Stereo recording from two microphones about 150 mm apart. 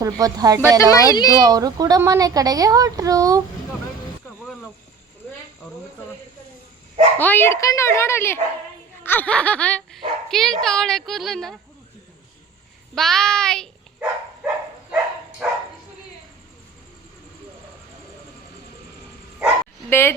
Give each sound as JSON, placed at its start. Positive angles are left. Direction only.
{"t": 0.0, "sound": "speech", "side_deg": -25}
{"t": 0.9, "sound": "speech", "side_deg": 25}
{"t": 1.4, "sound": "speech", "side_deg": -25}
{"t": 4.3, "sound": "vehicle", "side_deg": 5}
{"t": 7.2, "sound": "speech", "side_deg": 10}
{"t": 12.9, "sound": "speech", "side_deg": 0}
{"t": 14.0, "sound": "dog", "side_deg": -10}
{"t": 19.9, "sound": "speech", "side_deg": 15}